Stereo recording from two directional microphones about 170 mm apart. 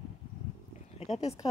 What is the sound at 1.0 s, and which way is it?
Speech, 40° left (ahead or behind).